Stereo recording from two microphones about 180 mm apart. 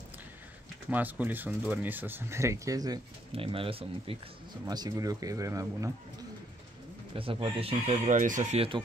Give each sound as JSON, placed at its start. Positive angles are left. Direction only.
{"t": 0.8, "sound": "speech", "side_deg": -10}
{"t": 3.3, "sound": "speech", "side_deg": -30}
{"t": 7.2, "sound": "speech", "side_deg": -30}